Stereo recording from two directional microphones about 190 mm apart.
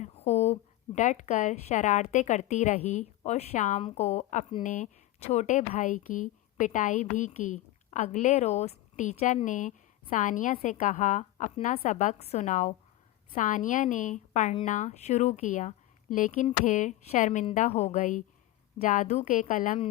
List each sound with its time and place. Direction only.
0.0 s a woman's voice: 35° left (ahead or behind)